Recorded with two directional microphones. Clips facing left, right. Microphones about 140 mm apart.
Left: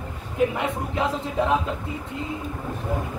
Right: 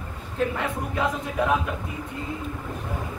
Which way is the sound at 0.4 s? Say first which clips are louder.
Left 4 dB; 15° left (ahead or behind).